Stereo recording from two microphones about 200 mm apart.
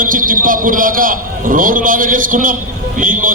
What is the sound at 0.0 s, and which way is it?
A man's voice, 40° right (ahead or behind).